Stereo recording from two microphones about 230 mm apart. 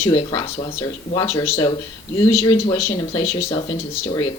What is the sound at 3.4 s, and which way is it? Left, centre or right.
Speech, left.